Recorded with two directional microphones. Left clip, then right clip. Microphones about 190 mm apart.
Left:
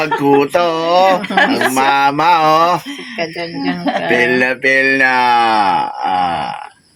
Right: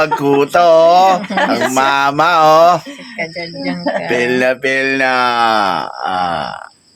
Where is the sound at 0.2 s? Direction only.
20° right (ahead or behind).